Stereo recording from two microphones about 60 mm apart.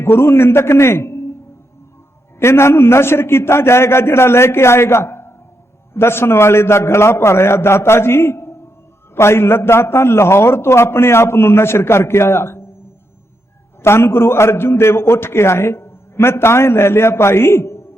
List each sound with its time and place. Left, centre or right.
0.0 s a man's voice: left
2.4 s a man's voice: left
13.8 s a man's voice: left